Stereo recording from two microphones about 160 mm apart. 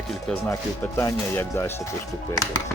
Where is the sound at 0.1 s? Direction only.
5° left (ahead or behind).